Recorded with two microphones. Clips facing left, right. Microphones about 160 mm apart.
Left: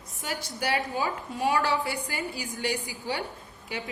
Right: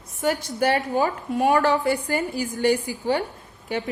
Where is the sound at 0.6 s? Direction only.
50° right (ahead or behind).